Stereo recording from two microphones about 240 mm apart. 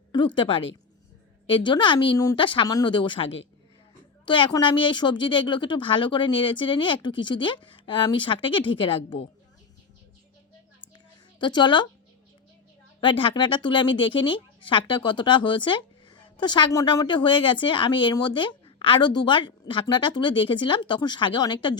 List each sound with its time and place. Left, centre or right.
0.3 s speech: left
4.3 s speech: centre
10.9 s a sound: centre
13.0 s speech: left